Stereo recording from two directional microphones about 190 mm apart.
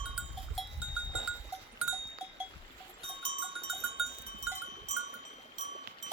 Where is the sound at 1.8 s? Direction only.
5° right (ahead or behind).